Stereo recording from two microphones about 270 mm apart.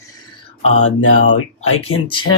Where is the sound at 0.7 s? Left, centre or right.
Left.